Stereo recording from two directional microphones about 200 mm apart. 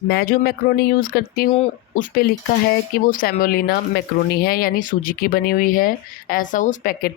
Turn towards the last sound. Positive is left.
turn(degrees=45)  # may be behind; listen again after turning